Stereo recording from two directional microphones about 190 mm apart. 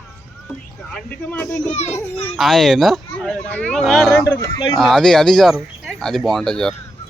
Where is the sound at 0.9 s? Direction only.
5° left (ahead or behind).